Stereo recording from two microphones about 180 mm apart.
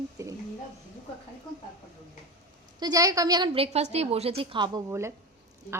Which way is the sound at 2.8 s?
20° right (ahead or behind).